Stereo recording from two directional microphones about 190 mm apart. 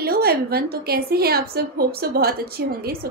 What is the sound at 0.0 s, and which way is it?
A woman's voice, 55° right (ahead or behind).